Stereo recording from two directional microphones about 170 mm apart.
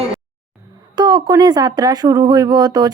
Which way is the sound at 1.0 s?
25° right (ahead or behind).